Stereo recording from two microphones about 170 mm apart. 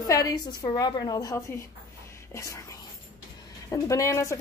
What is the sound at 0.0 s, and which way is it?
A woman's voice, 20° left (ahead or behind).